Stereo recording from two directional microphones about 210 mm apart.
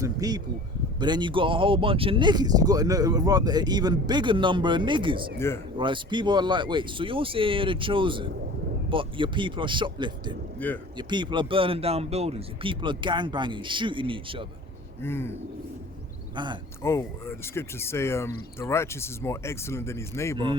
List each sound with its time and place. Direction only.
0.0 s a sound: 15° right (ahead or behind)
0.9 s speech: 20° right (ahead or behind)
15.0 s speech: 10° left (ahead or behind)
16.3 s speech: 20° right (ahead or behind)
16.8 s speech: 10° left (ahead or behind)